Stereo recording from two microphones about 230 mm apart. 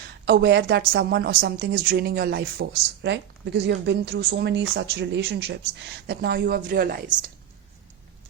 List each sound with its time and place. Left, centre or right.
0.3 s a woman's voice: right